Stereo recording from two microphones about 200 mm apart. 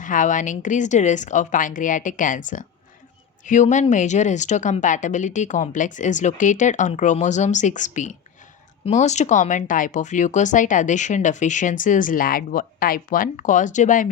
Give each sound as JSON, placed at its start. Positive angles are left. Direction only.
{"t": 0.0, "sound": "speech", "side_deg": 40}